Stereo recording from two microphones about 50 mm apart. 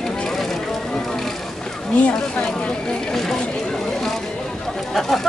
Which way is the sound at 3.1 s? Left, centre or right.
Centre.